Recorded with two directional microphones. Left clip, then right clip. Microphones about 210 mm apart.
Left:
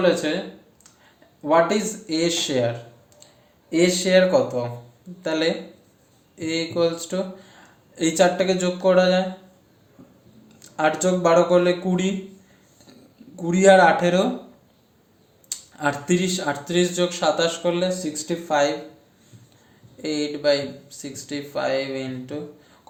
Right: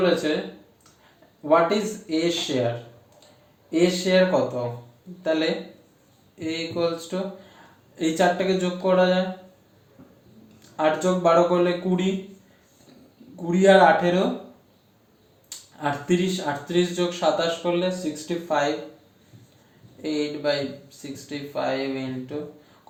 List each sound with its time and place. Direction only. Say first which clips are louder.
1.5 s speech: left 1 dB; 45° left (ahead or behind)
3.7 s speech: left 2 dB; 45° left (ahead or behind)
10.6 s speech: left 1 dB; 45° left (ahead or behind)
13.3 s speech: left 2 dB; 45° left (ahead or behind)
15.4 s speech: left 3 dB; 45° left (ahead or behind)
20.0 s speech: left 1 dB; 45° left (ahead or behind)